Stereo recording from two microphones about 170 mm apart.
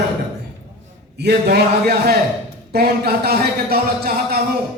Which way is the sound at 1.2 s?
70° right (ahead or behind).